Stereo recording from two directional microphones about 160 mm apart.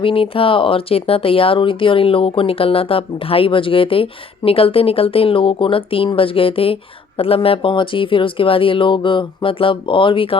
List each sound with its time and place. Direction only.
0.0 s speech: 35° left (ahead or behind)